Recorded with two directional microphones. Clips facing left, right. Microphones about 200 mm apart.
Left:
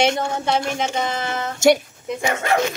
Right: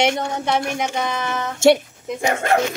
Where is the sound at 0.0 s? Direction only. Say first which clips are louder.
Even; 20° right (ahead or behind).